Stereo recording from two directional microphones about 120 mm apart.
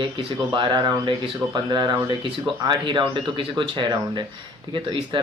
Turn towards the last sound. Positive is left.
turn(degrees=-45)  # may be behind; listen again after turning